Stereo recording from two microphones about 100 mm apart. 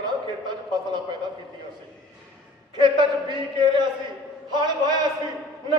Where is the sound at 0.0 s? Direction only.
45° right (ahead or behind).